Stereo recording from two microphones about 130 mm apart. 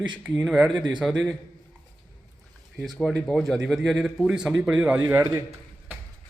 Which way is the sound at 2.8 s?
Centre (ahead or behind).